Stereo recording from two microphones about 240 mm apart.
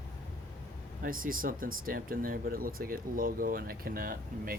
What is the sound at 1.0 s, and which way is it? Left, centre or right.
Speech, right.